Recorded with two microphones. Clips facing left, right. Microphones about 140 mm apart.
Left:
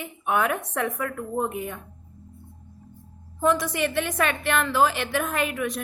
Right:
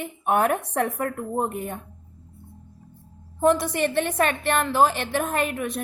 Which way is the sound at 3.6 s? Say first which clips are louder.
Right 2 dB; 35° right (ahead or behind).